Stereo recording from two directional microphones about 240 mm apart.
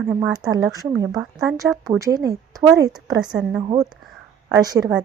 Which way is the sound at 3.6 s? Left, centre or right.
Right.